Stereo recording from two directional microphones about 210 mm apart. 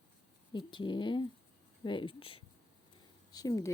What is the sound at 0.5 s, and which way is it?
Speech, 20° left (ahead or behind).